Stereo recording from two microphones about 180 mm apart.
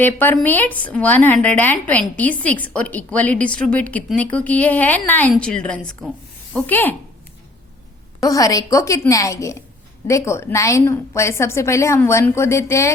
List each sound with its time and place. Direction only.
0.0 s a woman's voice: 10° left (ahead or behind)
8.2 s a woman's voice: 20° left (ahead or behind)